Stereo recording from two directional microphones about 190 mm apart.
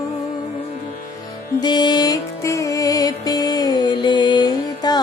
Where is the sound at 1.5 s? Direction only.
20° left (ahead or behind).